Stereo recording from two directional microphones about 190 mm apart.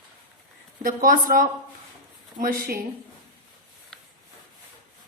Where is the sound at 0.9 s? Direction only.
45° right (ahead or behind).